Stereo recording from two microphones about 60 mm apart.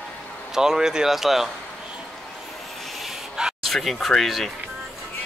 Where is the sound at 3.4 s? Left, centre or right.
Centre.